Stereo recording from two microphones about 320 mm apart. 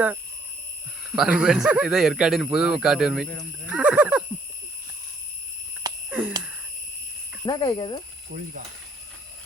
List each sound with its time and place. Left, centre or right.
1.0 s speech: centre
5.8 s a sound: centre
7.4 s speech: centre
8.3 s speech: right